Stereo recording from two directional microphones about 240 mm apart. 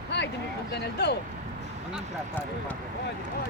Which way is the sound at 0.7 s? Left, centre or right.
Left.